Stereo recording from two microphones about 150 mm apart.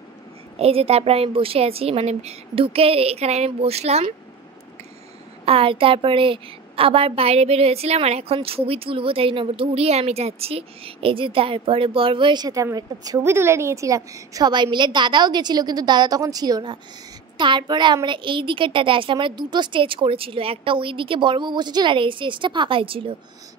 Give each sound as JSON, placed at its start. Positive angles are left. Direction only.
{"t": 0.6, "sound": "a woman's voice", "side_deg": -40}
{"t": 5.4, "sound": "a woman's voice", "side_deg": -40}